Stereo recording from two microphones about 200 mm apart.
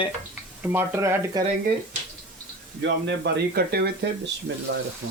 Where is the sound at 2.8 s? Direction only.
60° right (ahead or behind).